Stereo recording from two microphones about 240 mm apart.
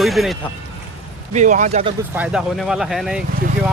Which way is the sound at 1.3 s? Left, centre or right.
Right.